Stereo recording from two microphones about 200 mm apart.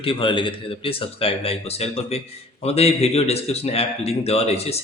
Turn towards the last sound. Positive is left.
turn(degrees=30)  # may be behind; listen again after turning